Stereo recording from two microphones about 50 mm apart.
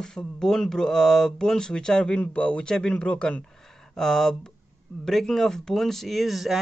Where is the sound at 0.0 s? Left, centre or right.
Centre.